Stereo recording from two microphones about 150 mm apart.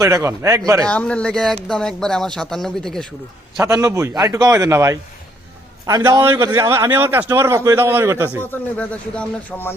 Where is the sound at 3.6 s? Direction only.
20° right (ahead or behind).